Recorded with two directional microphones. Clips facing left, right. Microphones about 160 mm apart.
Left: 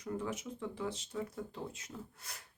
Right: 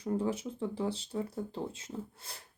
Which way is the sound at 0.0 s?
30° right (ahead or behind).